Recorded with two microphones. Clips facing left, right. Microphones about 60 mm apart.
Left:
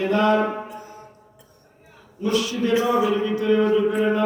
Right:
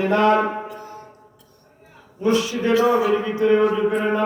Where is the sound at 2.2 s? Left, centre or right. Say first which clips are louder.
Right 3 dB; right.